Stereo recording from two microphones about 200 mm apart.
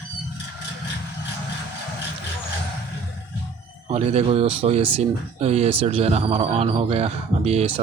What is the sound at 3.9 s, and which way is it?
Speech, 30° right (ahead or behind).